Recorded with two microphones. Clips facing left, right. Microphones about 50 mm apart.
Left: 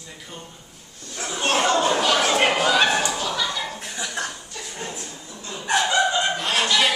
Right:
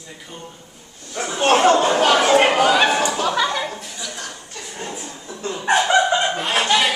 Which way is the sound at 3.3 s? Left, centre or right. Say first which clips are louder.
Right 6 dB; right.